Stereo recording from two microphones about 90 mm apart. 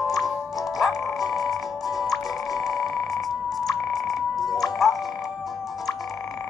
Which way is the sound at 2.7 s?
45° left (ahead or behind).